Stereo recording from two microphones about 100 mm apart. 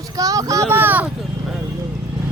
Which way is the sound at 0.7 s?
20° right (ahead or behind).